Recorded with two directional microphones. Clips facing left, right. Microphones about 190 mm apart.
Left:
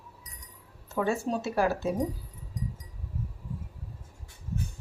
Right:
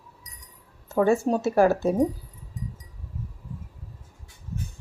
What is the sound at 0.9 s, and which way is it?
Speech, 45° right (ahead or behind).